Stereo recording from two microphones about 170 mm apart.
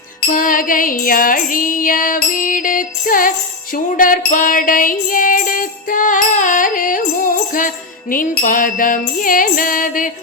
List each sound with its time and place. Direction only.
0.3 s music: 55° left (ahead or behind)